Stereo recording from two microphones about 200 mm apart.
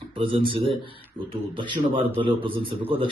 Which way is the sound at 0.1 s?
25° right (ahead or behind).